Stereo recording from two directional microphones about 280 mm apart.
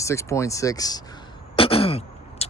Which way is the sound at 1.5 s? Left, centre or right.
Centre.